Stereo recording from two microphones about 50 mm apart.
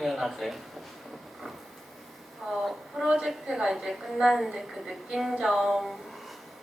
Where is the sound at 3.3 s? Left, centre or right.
Centre.